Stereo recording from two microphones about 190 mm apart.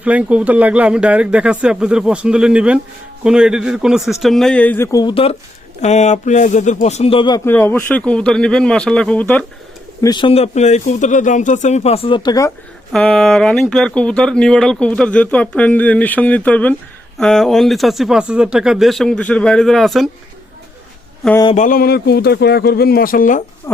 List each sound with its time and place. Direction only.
0.0 s speech: 5° right (ahead or behind); by 7.5 s 20° left (ahead or behind)
7.5 s speech: 10° left (ahead or behind)
10.0 s speech: 25° left (ahead or behind)
12.9 s speech: centre (ahead or behind)
21.5 s a man's voice: 45° left (ahead or behind)
23.7 s owl: 15° left (ahead or behind)